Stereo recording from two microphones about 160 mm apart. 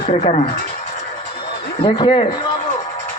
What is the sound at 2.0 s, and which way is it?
Speech, 30° left (ahead or behind).